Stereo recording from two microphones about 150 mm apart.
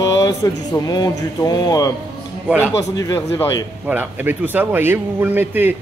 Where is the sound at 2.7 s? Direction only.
20° left (ahead or behind).